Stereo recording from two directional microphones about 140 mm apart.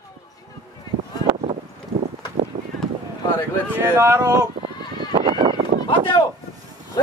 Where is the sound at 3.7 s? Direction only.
20° right (ahead or behind).